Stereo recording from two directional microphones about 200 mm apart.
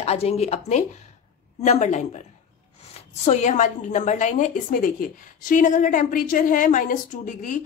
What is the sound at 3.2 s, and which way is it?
A woman's voice, 35° left (ahead or behind).